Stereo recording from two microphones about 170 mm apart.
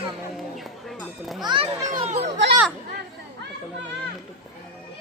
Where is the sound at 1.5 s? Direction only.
25° right (ahead or behind).